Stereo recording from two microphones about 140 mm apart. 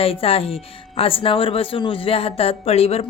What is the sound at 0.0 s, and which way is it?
Speech, 45° left (ahead or behind).